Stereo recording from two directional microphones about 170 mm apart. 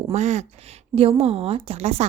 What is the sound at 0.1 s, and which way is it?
A woman's voice, 45° right (ahead or behind).